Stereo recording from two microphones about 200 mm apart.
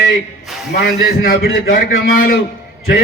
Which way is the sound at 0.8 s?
50° left (ahead or behind).